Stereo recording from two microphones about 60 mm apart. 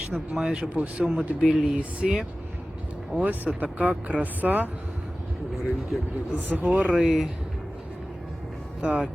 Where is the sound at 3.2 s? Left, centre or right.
Right.